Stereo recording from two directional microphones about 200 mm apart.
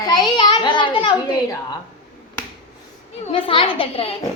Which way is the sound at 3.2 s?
25° left (ahead or behind).